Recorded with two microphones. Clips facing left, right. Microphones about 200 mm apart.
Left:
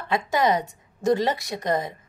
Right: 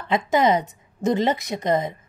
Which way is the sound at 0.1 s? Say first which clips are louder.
Right 3 dB; 20° right (ahead or behind).